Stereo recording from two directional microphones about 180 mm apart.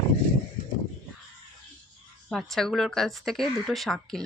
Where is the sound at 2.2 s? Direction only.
5° left (ahead or behind).